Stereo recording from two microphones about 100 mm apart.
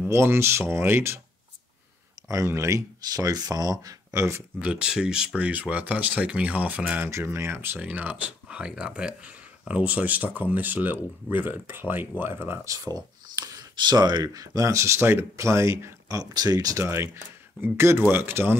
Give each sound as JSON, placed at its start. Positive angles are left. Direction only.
{"t": 0.1, "sound": "speech", "side_deg": -25}
{"t": 2.2, "sound": "speech", "side_deg": -30}
{"t": 4.6, "sound": "speech", "side_deg": -10}